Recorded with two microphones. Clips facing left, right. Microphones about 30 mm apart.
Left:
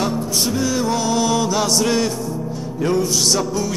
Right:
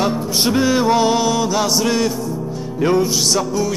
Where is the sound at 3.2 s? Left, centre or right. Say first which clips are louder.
Right 1 dB; centre.